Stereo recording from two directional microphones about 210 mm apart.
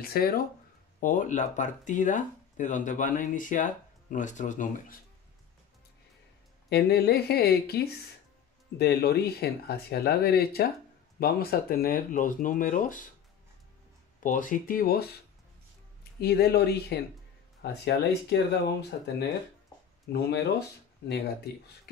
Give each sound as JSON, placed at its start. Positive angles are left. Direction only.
{"t": 0.0, "sound": "speech", "side_deg": 45}
{"t": 6.7, "sound": "speech", "side_deg": 50}
{"t": 14.2, "sound": "speech", "side_deg": 40}